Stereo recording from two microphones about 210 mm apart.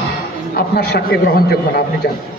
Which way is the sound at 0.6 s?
50° left (ahead or behind).